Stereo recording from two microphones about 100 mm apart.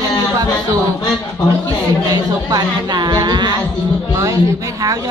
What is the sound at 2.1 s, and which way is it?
Speech, 40° right (ahead or behind).